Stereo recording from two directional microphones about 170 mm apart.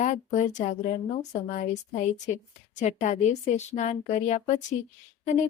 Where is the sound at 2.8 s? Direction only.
45° left (ahead or behind).